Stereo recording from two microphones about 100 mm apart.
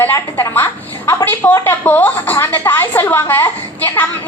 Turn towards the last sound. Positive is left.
turn(degrees=20)  # may be behind; listen again after turning